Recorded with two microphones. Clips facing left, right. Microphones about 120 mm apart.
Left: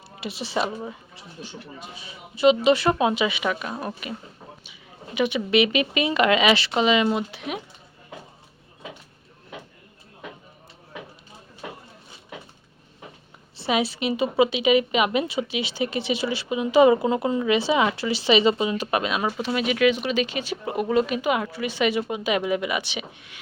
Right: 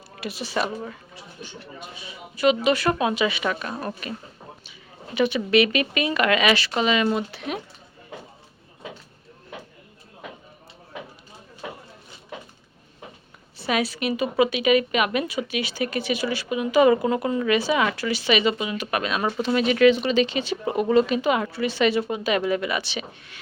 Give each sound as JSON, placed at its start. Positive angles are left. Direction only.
{"t": 0.2, "sound": "a woman's voice", "side_deg": 25}
{"t": 2.3, "sound": "a woman's voice", "side_deg": 25}
{"t": 13.6, "sound": "a woman's voice", "side_deg": 25}
{"t": 19.2, "sound": "speech", "side_deg": 5}